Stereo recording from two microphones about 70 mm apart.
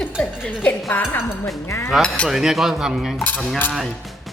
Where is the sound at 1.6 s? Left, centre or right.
Left.